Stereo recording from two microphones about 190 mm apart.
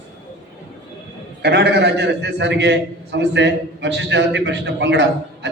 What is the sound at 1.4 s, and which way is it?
A man's voice, 60° right (ahead or behind).